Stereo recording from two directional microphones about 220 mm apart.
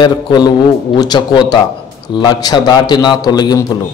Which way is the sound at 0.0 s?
20° left (ahead or behind).